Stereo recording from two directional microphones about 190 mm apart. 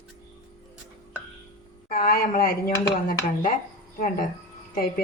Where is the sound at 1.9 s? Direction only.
50° left (ahead or behind).